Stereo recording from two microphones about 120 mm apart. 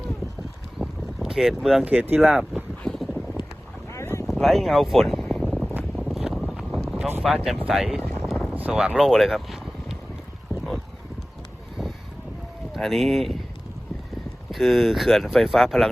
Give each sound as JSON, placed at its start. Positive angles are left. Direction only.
{"t": 0.8, "sound": "boat", "side_deg": -5}
{"t": 1.8, "sound": "speech", "side_deg": -15}
{"t": 2.2, "sound": "speech", "side_deg": -5}
{"t": 2.8, "sound": "wind noise", "side_deg": 5}
{"t": 3.9, "sound": "boat", "side_deg": 25}
{"t": 4.3, "sound": "a sound", "side_deg": 0}
{"t": 6.0, "sound": "vehicle", "side_deg": 0}
{"t": 7.2, "sound": "speech", "side_deg": 0}
{"t": 8.0, "sound": "boat", "side_deg": 5}
{"t": 8.5, "sound": "speech", "side_deg": -10}
{"t": 12.7, "sound": "speech", "side_deg": 0}
{"t": 14.5, "sound": "speech", "side_deg": 0}